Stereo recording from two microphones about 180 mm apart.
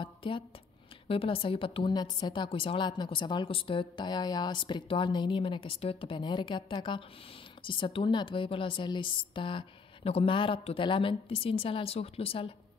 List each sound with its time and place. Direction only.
0.0 s a woman's voice: 30° left (ahead or behind)